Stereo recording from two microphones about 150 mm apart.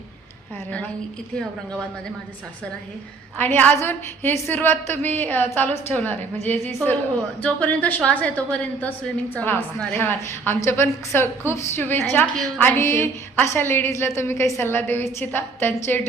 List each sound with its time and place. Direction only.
3.3 s a woman's voice: 10° left (ahead or behind)